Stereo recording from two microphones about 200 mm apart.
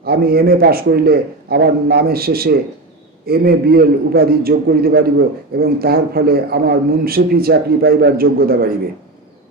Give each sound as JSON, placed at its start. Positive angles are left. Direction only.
{"t": 0.0, "sound": "a man's voice", "side_deg": -50}